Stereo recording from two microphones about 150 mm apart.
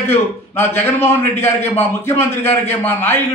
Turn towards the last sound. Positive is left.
turn(degrees=15)  # may be behind; listen again after turning